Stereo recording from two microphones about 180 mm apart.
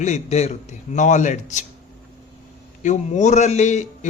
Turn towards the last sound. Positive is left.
turn(degrees=40)  # may be behind; listen again after turning